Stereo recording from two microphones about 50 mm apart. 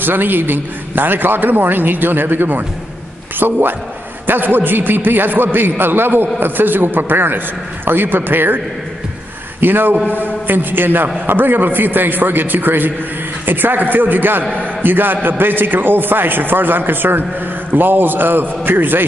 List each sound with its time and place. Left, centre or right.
0.0 s a man's voice: right
9.6 s a man's voice: right